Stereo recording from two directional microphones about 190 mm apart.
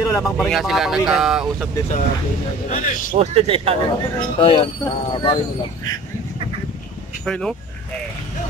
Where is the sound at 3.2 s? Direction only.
30° right (ahead or behind).